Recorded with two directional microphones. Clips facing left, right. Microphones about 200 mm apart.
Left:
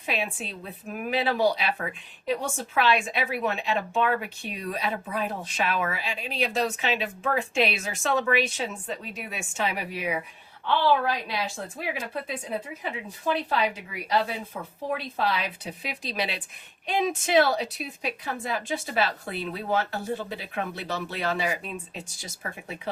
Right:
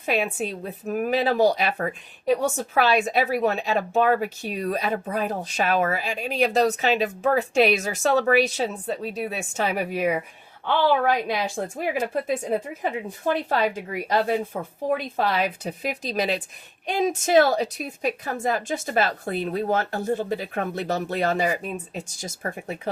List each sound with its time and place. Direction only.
0.0 s a woman's voice: 45° right (ahead or behind)